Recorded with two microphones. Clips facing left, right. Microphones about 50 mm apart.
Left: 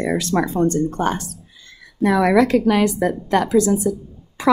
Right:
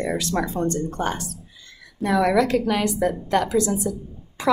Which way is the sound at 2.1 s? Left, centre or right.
Left.